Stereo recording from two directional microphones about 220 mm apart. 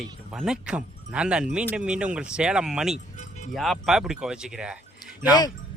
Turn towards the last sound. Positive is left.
turn(degrees=15)  # may be behind; listen again after turning